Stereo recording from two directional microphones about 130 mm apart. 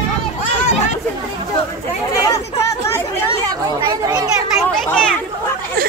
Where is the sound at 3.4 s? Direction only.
35° right (ahead or behind).